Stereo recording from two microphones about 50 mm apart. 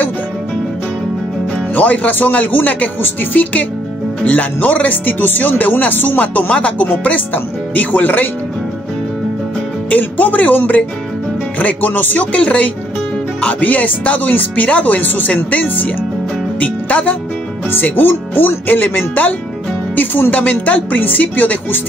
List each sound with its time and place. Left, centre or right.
1.8 s speech: left
9.8 s speech: left
17.6 s speech: left